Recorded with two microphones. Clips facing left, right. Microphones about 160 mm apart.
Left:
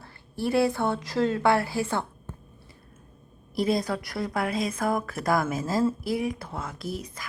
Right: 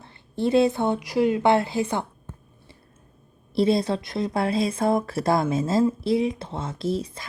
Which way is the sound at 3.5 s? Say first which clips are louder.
Right 4 dB; 30° right (ahead or behind).